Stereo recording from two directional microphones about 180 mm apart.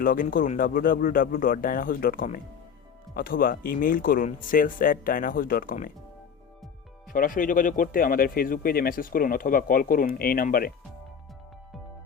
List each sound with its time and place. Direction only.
0.0 s speech: 50° left (ahead or behind)
7.1 s speech: 50° left (ahead or behind)